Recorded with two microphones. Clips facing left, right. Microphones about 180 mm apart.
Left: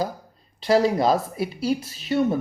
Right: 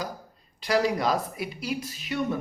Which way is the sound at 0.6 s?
30° left (ahead or behind).